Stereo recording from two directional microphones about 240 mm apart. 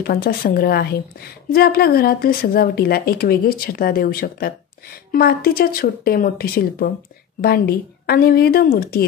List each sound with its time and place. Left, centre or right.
0.0 s speech: left